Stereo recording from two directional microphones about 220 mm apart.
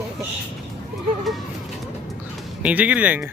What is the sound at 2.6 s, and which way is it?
Speech, 5° right (ahead or behind).